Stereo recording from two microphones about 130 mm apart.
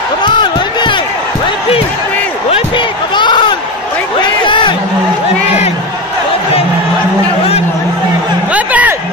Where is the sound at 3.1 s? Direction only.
35° left (ahead or behind).